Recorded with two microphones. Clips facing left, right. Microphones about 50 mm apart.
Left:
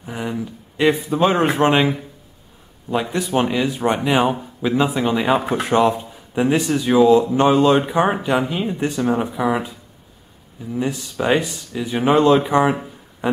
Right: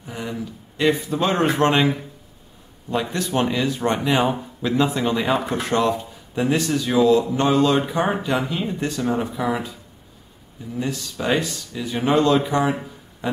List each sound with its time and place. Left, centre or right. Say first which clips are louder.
0.0 s speech: left 4 dB; centre
10.7 s speech: left 3 dB; centre